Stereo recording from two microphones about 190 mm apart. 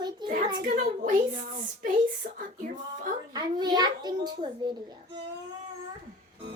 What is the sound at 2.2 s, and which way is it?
Child singing, 50° right (ahead or behind).